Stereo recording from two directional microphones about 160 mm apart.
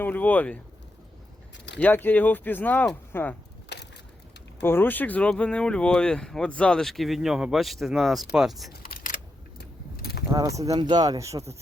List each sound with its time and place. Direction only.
0.0 s speech: 10° left (ahead or behind)
1.8 s speech: 10° left (ahead or behind)
4.6 s speech: 15° left (ahead or behind)
8.9 s camera: 55° left (ahead or behind)
10.0 s a sound: 80° left
10.2 s speech: 20° right (ahead or behind)